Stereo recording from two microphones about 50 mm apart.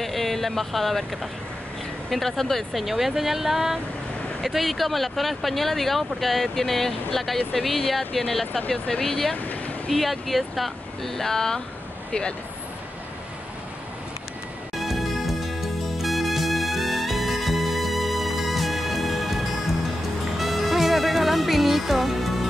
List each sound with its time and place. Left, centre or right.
0.0 s speech: centre
2.8 s speech: centre
8.6 s speech: centre
14.8 s music: centre